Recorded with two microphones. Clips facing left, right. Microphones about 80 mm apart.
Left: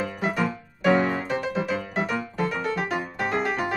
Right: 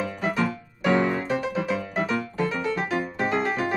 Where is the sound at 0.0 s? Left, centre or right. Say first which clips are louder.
Even; centre.